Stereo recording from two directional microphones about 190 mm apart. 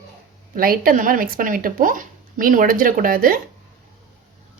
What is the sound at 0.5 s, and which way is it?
Speech, 50° right (ahead or behind).